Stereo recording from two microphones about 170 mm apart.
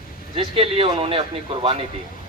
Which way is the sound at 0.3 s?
35° right (ahead or behind).